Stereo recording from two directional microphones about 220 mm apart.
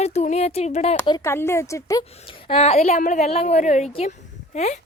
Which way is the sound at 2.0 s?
25° left (ahead or behind).